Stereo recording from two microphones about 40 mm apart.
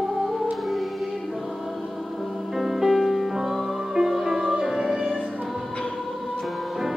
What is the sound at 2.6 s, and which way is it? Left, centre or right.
Music, centre.